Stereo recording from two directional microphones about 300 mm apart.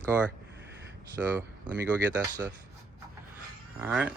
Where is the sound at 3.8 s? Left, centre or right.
Centre.